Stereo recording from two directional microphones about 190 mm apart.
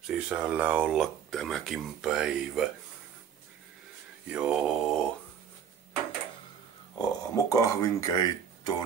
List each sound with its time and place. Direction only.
0.0 s speech: 5° right (ahead or behind)
4.3 s speech: 5° right (ahead or behind)
7.0 s speech: 15° left (ahead or behind)